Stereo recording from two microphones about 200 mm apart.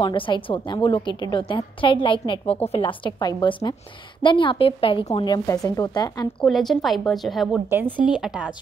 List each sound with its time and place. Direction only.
0.0 s a woman's voice: 25° left (ahead or behind)
6.4 s a woman's voice: centre (ahead or behind)